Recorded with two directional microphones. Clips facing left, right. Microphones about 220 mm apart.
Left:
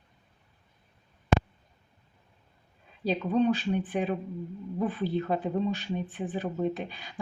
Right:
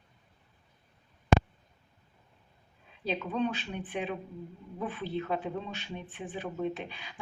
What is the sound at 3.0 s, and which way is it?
Speech, 40° left (ahead or behind).